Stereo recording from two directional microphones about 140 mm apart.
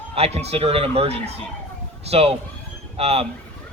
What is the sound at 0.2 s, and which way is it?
A man's voice, 45° right (ahead or behind).